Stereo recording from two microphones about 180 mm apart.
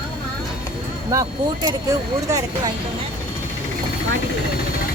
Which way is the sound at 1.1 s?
20° right (ahead or behind).